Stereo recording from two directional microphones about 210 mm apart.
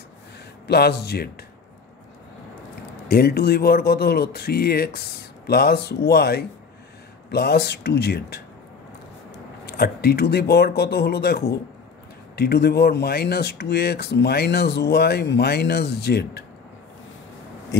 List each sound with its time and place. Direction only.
0.7 s speech: 50° left (ahead or behind)
3.1 s speech: 45° left (ahead or behind)
9.7 s speech: 50° left (ahead or behind)